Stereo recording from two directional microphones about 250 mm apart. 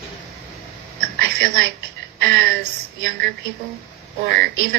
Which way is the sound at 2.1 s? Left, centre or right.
Right.